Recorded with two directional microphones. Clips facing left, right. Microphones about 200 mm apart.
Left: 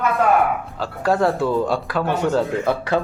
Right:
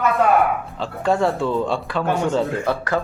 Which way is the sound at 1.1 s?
Centre (ahead or behind).